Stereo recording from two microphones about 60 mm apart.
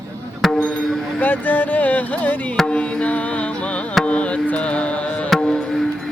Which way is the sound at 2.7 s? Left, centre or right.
Centre.